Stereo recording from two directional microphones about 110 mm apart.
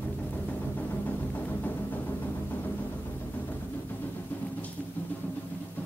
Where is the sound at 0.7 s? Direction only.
15° left (ahead or behind).